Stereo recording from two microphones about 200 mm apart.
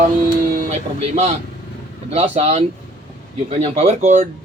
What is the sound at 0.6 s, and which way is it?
Speech, 35° right (ahead or behind).